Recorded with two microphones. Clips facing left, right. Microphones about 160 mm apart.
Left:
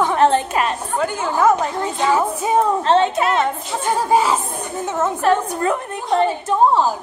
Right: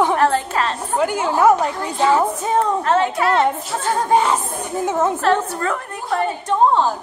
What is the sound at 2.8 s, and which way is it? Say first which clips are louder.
Speech: left 2 dB; 25° left (ahead or behind).